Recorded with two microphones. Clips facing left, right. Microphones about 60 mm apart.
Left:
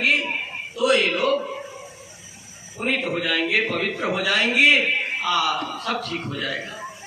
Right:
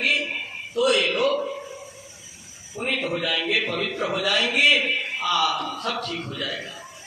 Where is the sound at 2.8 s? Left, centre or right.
Left.